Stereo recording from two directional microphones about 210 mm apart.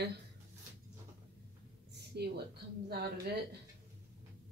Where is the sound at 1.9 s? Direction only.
50° right (ahead or behind).